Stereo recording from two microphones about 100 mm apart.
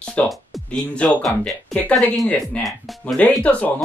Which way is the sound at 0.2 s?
10° left (ahead or behind).